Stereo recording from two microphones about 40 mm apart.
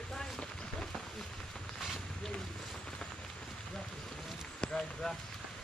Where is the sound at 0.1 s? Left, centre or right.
Centre.